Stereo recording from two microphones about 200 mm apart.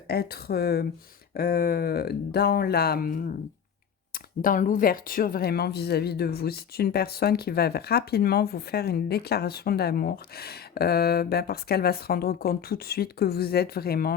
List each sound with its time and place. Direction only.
0.1 s speech: 50° left (ahead or behind)